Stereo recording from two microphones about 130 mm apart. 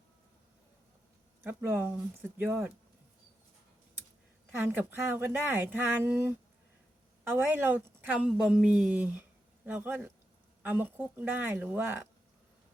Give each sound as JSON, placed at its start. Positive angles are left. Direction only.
{"t": 1.5, "sound": "a woman's voice", "side_deg": -15}
{"t": 4.5, "sound": "a woman's voice", "side_deg": -15}